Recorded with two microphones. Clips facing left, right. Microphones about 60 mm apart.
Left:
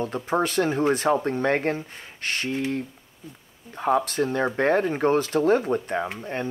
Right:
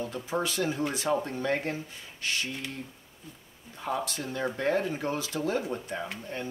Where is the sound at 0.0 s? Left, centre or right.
Left.